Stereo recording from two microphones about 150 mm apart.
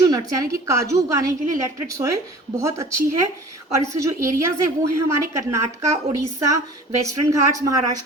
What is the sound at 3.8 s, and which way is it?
A woman's voice, 20° right (ahead or behind).